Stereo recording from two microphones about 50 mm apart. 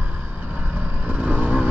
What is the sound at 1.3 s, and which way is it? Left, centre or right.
Vehicle, right.